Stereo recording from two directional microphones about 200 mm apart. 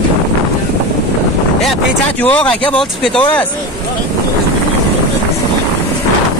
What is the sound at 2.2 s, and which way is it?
Speech, 5° left (ahead or behind).